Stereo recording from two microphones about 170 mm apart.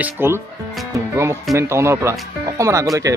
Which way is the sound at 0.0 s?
15° right (ahead or behind).